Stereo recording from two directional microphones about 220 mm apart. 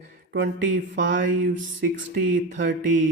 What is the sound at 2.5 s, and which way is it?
Speech, 55° right (ahead or behind).